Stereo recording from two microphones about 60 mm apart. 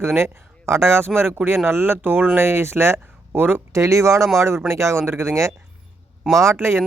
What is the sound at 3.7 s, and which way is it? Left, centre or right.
Speech, right.